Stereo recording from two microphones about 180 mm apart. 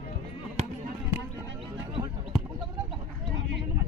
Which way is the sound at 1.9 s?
30° right (ahead or behind).